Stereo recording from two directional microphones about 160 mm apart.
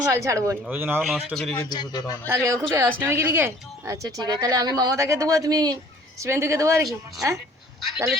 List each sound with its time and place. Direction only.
0.1 s speech: 20° right (ahead or behind)
1.0 s a man's voice: centre (ahead or behind)
1.5 s a man's voice: 25° left (ahead or behind)
2.2 s speech: 15° right (ahead or behind)